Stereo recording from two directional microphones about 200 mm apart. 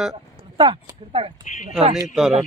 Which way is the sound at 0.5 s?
25° right (ahead or behind).